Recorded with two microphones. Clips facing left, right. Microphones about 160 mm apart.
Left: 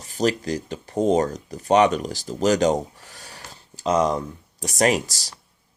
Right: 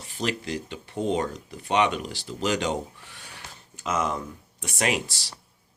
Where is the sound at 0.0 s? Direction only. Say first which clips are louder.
Left 7 dB; 40° left (ahead or behind).